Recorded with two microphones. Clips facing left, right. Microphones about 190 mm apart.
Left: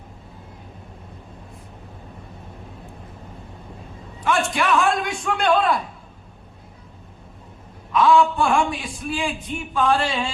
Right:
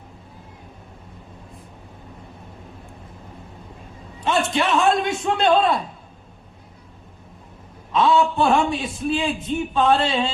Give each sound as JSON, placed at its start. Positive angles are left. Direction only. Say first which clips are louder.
{"t": 4.2, "sound": "a man's voice", "louder": "right 1 dB", "side_deg": -25}
{"t": 7.9, "sound": "a man's voice", "louder": "left 1 dB", "side_deg": -25}